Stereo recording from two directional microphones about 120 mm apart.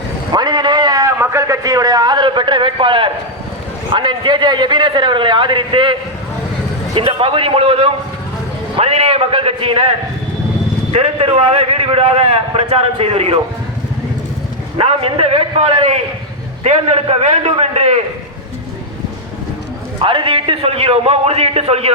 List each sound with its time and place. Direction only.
0.3 s a man's voice: 35° right (ahead or behind)
10.9 s a man's voice: 55° right (ahead or behind)
14.8 s a man's voice: 55° right (ahead or behind)
20.0 s a man's voice: 45° right (ahead or behind)